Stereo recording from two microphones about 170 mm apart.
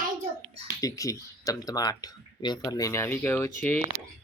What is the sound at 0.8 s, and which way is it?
Speech, 20° left (ahead or behind).